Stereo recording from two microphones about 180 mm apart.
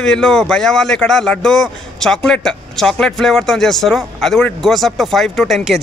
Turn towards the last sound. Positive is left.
turn(degrees=0)  # may be behind; listen again after turning